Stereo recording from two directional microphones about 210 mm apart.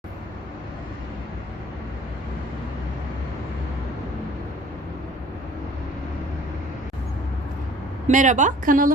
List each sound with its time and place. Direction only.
8.0 s a woman's voice: 35° right (ahead or behind)